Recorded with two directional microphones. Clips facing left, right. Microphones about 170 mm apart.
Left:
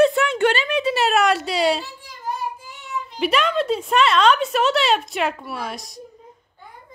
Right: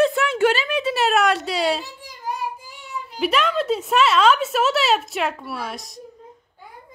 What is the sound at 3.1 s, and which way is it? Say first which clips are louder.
Speech: left 1 dB; centre (ahead or behind).